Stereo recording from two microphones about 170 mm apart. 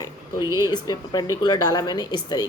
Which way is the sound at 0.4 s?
15° right (ahead or behind).